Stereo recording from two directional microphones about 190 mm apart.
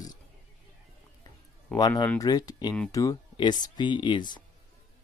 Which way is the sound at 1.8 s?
20° left (ahead or behind).